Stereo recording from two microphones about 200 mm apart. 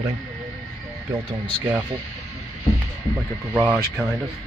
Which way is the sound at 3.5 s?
10° right (ahead or behind).